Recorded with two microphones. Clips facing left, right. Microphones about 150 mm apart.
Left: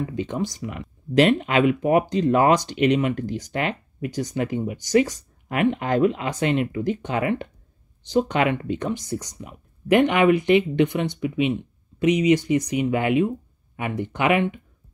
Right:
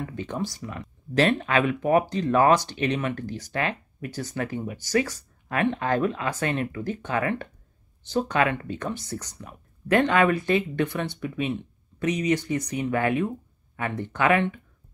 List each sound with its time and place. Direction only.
0.1 s speech: 20° left (ahead or behind)